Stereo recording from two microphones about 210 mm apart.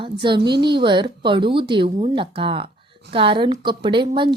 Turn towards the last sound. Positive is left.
turn(degrees=-20)  # may be behind; listen again after turning